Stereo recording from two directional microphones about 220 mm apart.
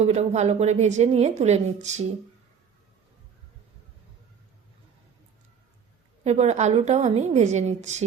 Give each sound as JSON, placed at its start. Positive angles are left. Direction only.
{"t": 0.0, "sound": "a woman's voice", "side_deg": -30}
{"t": 6.2, "sound": "a woman's voice", "side_deg": -30}